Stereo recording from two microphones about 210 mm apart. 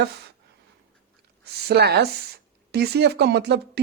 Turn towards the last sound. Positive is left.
turn(degrees=-50)  # may be behind; listen again after turning